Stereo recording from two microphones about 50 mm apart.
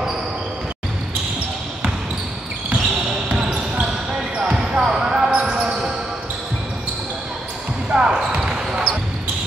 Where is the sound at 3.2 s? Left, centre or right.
Right.